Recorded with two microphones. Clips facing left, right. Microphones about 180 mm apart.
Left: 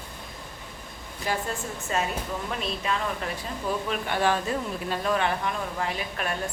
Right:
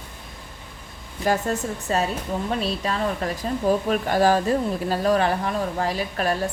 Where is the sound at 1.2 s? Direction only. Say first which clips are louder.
Right 7 dB; 45° right (ahead or behind).